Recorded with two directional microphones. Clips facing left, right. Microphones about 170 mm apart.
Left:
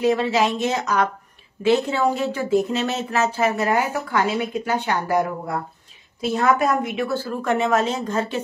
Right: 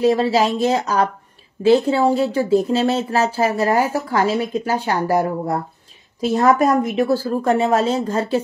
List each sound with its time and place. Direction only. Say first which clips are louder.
0.0 s speech: right 3 dB; 35° right (ahead or behind)